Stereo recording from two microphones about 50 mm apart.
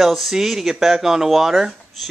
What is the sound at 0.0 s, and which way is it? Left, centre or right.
Speech, centre.